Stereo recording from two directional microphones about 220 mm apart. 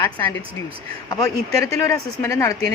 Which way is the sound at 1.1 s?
15° left (ahead or behind).